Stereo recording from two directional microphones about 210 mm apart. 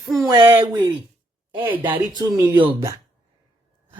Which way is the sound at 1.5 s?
10° right (ahead or behind).